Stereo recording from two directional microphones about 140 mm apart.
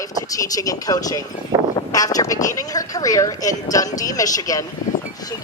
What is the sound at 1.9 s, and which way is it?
Speech, 25° left (ahead or behind).